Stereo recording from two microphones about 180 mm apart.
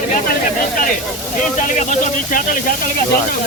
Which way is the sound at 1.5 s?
45° left (ahead or behind).